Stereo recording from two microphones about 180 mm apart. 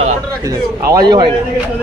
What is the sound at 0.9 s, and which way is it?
Speech, 25° right (ahead or behind).